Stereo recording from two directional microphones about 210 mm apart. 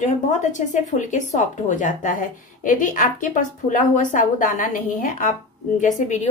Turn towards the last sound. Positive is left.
turn(degrees=35)  # may be behind; listen again after turning